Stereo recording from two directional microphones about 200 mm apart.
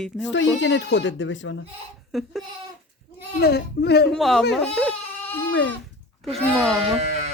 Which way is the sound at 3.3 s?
55° left (ahead or behind).